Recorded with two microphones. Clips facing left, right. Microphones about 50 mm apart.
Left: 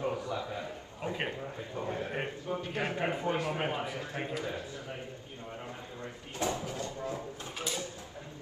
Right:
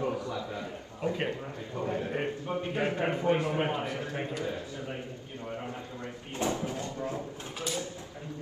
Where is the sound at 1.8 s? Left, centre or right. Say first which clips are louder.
Right 4 dB; right.